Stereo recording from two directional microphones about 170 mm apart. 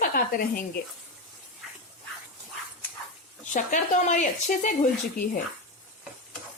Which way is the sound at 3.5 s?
45° left (ahead or behind).